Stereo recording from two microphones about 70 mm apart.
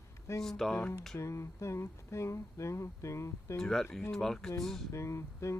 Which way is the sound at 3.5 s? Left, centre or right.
Centre.